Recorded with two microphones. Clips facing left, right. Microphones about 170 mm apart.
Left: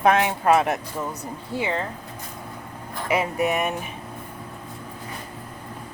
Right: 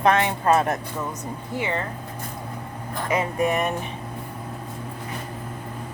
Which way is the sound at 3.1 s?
10° left (ahead or behind).